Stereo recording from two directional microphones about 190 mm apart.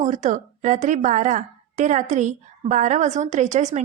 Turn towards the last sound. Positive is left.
turn(degrees=-40)  # may be behind; listen again after turning